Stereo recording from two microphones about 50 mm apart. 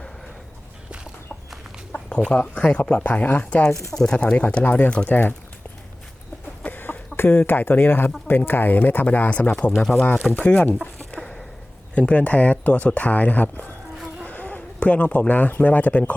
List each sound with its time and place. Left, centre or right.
1.9 s a sound: centre
2.3 s speech: left
3.9 s speech: centre
5.0 s speech: left
6.6 s bird: left
8.3 s speech: left
9.5 s speech: left
9.7 s speech: centre
10.3 s speech: left
11.2 s a sound: centre
11.9 s speech: left
14.3 s a sound: left
14.8 s speech: left